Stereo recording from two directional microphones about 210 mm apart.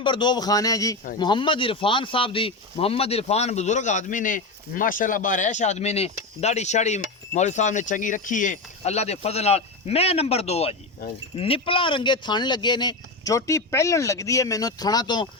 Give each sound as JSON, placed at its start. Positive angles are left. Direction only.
{"t": 0.0, "sound": "speech", "side_deg": 20}